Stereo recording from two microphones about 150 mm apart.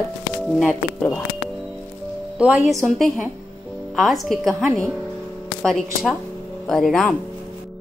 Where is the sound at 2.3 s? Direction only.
5° right (ahead or behind).